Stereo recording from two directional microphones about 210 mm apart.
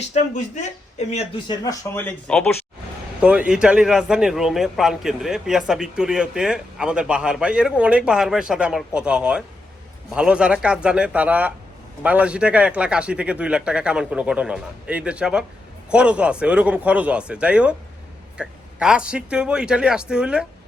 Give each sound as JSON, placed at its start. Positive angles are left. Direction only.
{"t": 0.1, "sound": "speech", "side_deg": 35}
{"t": 1.5, "sound": "speech", "side_deg": 15}
{"t": 3.2, "sound": "a man's voice", "side_deg": -5}